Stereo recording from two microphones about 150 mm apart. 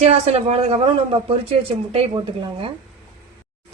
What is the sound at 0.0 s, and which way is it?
Speech, 45° right (ahead or behind).